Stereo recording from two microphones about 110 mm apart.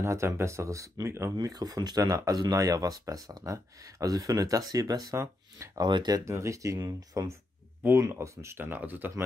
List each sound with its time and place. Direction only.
0.0 s speech: 25° right (ahead or behind)
5.9 s speech: 40° right (ahead or behind)
7.8 s speech: 20° right (ahead or behind)